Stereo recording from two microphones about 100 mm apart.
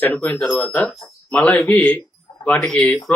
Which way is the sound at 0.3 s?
Centre (ahead or behind).